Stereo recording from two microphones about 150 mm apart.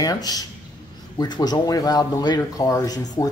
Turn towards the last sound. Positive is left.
turn(degrees=25)  # may be behind; listen again after turning